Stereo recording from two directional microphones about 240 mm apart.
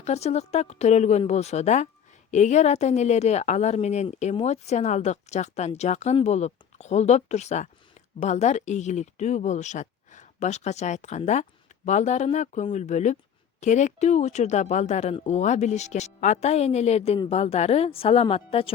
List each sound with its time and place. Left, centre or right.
0.0 s speech: left